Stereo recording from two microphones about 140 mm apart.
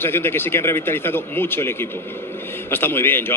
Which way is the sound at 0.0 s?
15° left (ahead or behind).